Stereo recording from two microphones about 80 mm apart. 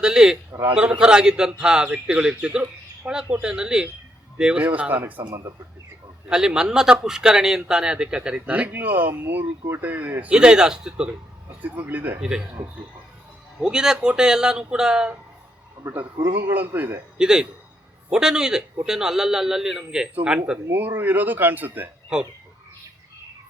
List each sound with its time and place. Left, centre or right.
0.0 s a man's voice: centre
6.2 s a man's voice: centre
10.3 s a man's voice: centre
11.6 s speech: right
12.2 s a man's voice: centre
13.7 s a man's voice: centre
15.9 s speech: right
17.2 s a man's voice: centre
20.7 s speech: right
22.1 s a man's voice: centre